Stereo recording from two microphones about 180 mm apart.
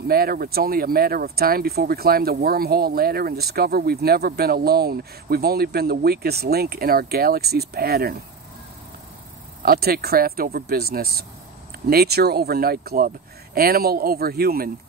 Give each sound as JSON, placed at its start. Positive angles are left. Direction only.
{"t": 0.1, "sound": "speech", "side_deg": -55}
{"t": 9.6, "sound": "speech", "side_deg": -55}